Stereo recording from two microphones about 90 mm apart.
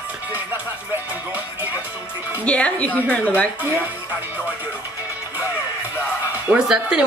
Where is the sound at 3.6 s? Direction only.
20° right (ahead or behind).